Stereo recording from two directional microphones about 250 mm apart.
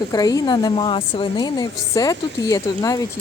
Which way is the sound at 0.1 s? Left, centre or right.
Centre.